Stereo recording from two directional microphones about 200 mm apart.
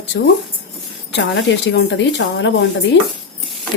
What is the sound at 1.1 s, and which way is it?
Speech, 65° left (ahead or behind).